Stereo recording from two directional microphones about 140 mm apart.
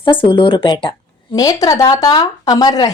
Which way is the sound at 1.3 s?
25° left (ahead or behind).